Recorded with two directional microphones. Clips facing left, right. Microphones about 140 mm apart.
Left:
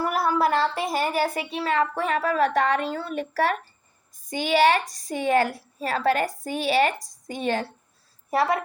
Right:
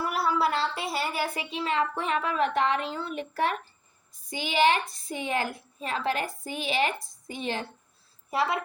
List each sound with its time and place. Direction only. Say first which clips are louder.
0.0 s a woman's voice: left 4 dB; 50° left (ahead or behind)
4.3 s a woman's voice: left 4 dB; 45° left (ahead or behind)